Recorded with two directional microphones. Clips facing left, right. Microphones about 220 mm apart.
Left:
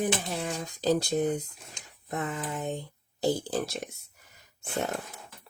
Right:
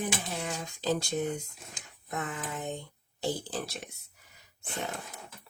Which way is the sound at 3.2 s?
45° left (ahead or behind).